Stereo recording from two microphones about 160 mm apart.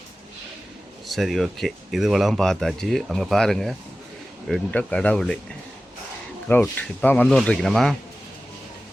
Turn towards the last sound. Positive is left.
turn(degrees=0)  # may be behind; listen again after turning